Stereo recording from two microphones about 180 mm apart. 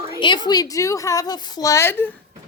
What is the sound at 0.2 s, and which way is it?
A woman's voice, 25° left (ahead or behind).